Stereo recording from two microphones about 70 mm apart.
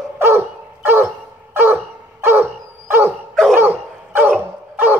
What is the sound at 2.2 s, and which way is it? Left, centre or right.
Dog, right.